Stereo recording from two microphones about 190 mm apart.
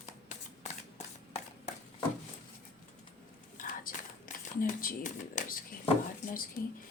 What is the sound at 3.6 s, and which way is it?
Whispering, 45° left (ahead or behind).